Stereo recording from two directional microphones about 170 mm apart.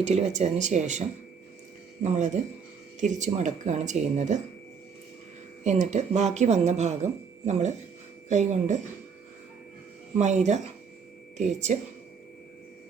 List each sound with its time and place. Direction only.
0.0 s speech: 40° right (ahead or behind)
5.6 s speech: 45° right (ahead or behind)
10.2 s speech: 45° right (ahead or behind)